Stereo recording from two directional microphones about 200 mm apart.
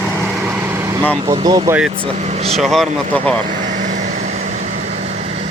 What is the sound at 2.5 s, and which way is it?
Speech, centre (ahead or behind).